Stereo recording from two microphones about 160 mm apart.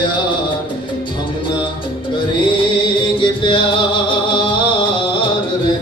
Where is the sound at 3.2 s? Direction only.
30° left (ahead or behind).